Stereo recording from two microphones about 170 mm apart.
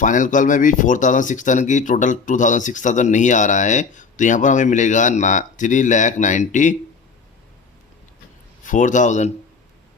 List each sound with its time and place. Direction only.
0.0 s speech: 50° left (ahead or behind)
8.6 s speech: 50° left (ahead or behind)